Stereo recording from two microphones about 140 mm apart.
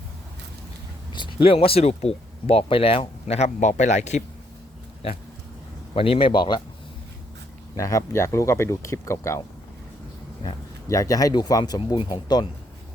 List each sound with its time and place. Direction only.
1.1 s speech: 35° left (ahead or behind); by 4.2 s 55° left (ahead or behind)
5.9 s speech: 45° left (ahead or behind)
7.8 s speech: 25° left (ahead or behind)
10.8 s speech: 25° left (ahead or behind)